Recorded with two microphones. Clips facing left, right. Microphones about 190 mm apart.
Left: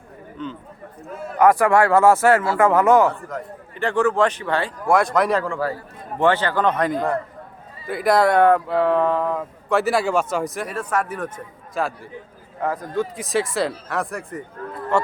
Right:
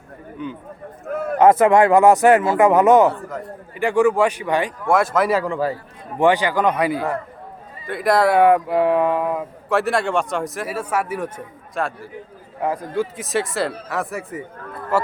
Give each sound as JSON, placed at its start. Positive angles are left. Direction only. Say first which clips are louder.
{"t": 0.4, "sound": "speech", "louder": "right 1 dB", "side_deg": -10}
{"t": 1.0, "sound": "a sound", "louder": "right 9 dB", "side_deg": -60}
{"t": 1.4, "sound": "speech", "louder": "right 2 dB", "side_deg": -20}
{"t": 3.1, "sound": "speech", "louder": "right 2 dB", "side_deg": -5}
{"t": 4.9, "sound": "a man's voice", "louder": "even", "side_deg": 0}
{"t": 5.5, "sound": "speech", "louder": "right 2 dB", "side_deg": -20}
{"t": 9.7, "sound": "a man's voice", "louder": "even", "side_deg": 0}
{"t": 11.7, "sound": "a man's voice", "louder": "even", "side_deg": 0}
{"t": 12.6, "sound": "a man's voice", "louder": "right 1 dB", "side_deg": -10}